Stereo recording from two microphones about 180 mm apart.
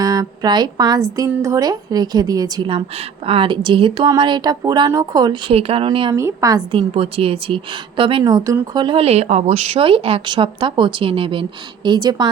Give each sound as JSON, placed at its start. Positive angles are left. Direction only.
{"t": 0.0, "sound": "speech", "side_deg": -20}
{"t": 6.1, "sound": "speech", "side_deg": -15}